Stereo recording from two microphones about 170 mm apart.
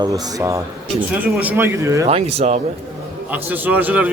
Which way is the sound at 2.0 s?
40° right (ahead or behind).